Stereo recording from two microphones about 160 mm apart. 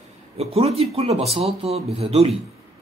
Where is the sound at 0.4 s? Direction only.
40° right (ahead or behind).